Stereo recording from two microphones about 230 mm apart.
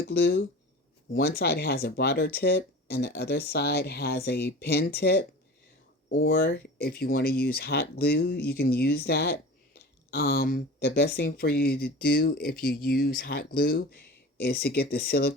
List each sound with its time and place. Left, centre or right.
0.1 s speech: left